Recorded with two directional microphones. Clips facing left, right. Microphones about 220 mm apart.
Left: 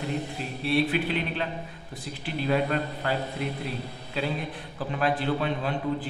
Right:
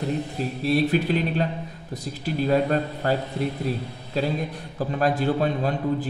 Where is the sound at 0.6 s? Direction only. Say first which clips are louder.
Right 3 dB; 40° right (ahead or behind).